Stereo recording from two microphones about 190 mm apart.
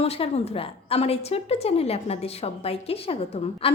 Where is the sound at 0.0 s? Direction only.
30° left (ahead or behind).